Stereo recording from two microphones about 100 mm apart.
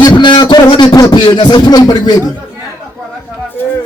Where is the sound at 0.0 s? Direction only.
50° left (ahead or behind).